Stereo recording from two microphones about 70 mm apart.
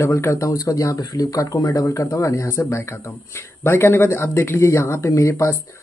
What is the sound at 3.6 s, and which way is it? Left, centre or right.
Speech, left.